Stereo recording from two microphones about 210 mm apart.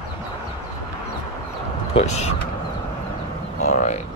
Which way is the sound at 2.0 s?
30° left (ahead or behind).